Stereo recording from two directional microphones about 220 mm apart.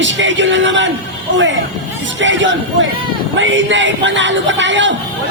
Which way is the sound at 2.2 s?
55° right (ahead or behind).